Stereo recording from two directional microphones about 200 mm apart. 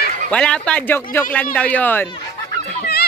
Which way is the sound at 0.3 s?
5° left (ahead or behind).